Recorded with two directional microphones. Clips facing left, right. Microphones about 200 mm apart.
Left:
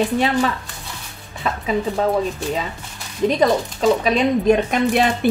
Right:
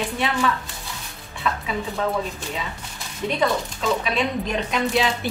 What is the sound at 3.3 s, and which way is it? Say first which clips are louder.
Speech: left 4 dB; 40° left (ahead or behind).